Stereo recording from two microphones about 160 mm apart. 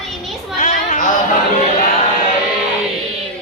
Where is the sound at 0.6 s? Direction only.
50° left (ahead or behind).